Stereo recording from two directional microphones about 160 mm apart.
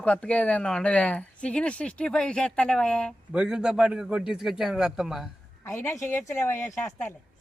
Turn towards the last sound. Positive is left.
turn(degrees=15)  # may be behind; listen again after turning